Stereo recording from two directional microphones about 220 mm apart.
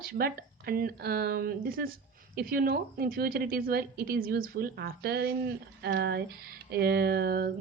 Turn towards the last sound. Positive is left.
turn(degrees=-45)  # may be behind; listen again after turning